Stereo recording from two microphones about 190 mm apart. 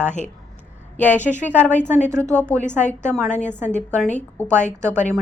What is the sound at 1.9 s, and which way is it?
Speech, 10° right (ahead or behind).